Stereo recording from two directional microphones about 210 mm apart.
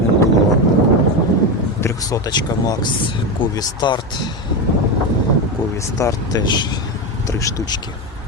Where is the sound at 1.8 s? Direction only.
15° left (ahead or behind).